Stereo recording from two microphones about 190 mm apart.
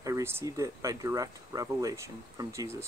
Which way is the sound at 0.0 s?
15° right (ahead or behind).